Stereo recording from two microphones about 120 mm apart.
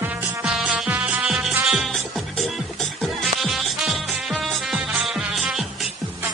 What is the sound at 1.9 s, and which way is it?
Music, centre (ahead or behind).